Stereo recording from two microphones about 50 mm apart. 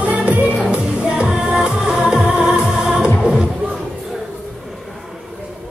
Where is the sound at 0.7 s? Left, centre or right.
Centre.